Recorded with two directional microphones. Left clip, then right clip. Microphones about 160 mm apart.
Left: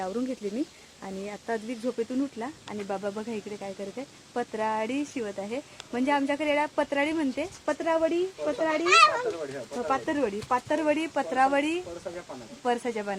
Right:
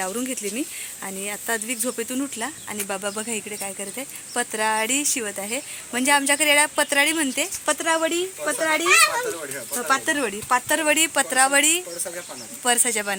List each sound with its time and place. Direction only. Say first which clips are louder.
0.0 s speech: right 4 dB; 15° right (ahead or behind)
8.8 s speech: right 2 dB; 55° right (ahead or behind)
9.9 s speech: right 6 dB; 15° right (ahead or behind)